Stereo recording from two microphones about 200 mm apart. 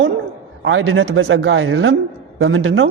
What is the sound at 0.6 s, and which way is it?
A man's voice, 75° right (ahead or behind).